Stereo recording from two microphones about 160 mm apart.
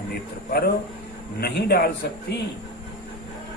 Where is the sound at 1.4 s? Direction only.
85° left.